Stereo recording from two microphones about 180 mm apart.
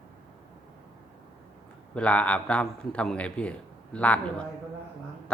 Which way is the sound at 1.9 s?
5° left (ahead or behind).